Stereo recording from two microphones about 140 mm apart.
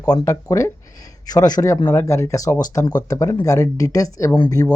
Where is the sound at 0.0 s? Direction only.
25° left (ahead or behind).